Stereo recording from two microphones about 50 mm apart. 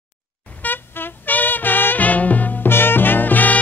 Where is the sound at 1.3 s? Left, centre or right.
Left.